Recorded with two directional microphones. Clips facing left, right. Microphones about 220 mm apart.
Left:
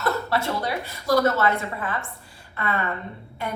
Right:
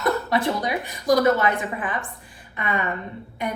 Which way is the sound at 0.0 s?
15° right (ahead or behind).